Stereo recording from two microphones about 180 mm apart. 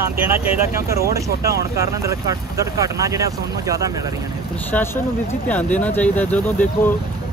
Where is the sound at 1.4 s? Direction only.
15° right (ahead or behind).